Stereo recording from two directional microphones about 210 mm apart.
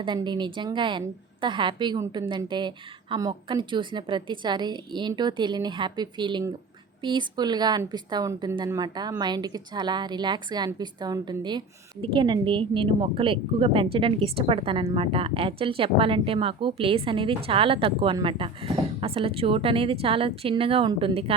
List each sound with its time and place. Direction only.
0.0 s speech: 20° right (ahead or behind)